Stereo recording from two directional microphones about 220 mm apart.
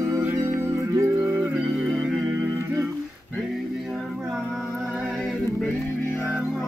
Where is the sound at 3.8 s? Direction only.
Centre (ahead or behind).